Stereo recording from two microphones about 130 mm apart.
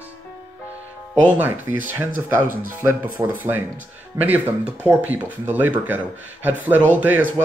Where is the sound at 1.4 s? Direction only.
15° right (ahead or behind).